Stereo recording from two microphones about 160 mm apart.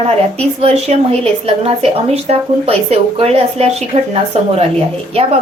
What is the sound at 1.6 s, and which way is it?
A woman's voice, 40° right (ahead or behind).